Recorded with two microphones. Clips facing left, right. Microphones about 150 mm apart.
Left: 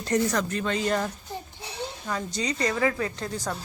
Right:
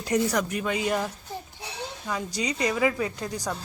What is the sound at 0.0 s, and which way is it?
A woman's voice, 10° right (ahead or behind).